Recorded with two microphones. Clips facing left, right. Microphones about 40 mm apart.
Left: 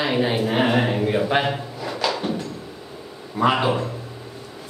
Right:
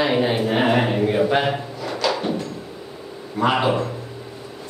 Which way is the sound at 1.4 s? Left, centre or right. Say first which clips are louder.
Right 2 dB; centre.